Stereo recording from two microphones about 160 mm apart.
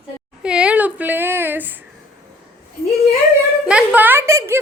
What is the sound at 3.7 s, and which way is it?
Speech, 10° right (ahead or behind).